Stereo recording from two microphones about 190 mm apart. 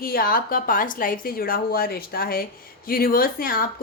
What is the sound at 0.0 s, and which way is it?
A woman's voice, 50° left (ahead or behind).